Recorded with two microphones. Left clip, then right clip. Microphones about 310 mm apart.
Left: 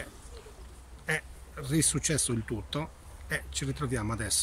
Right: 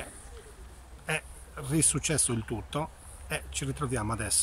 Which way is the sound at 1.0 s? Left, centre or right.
Centre.